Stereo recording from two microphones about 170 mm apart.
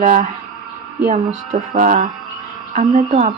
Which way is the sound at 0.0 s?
50° right (ahead or behind).